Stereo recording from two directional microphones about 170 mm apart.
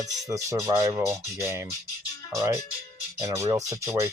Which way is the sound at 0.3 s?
20° right (ahead or behind).